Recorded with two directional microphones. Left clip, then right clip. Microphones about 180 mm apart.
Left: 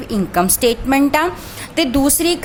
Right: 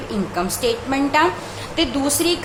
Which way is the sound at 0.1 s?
60° left (ahead or behind).